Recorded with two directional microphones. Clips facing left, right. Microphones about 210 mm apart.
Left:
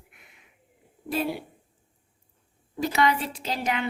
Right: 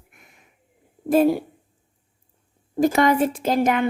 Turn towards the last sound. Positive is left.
turn(degrees=-50)  # may be behind; listen again after turning